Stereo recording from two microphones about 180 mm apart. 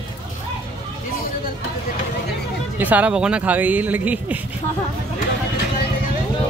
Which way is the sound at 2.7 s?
10° right (ahead or behind).